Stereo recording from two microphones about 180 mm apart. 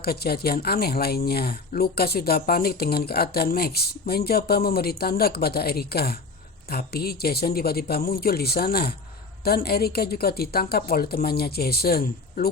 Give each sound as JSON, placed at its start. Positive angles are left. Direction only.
{"t": 0.0, "sound": "speech", "side_deg": 60}